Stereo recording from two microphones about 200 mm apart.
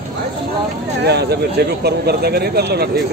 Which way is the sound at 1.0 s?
55° right (ahead or behind).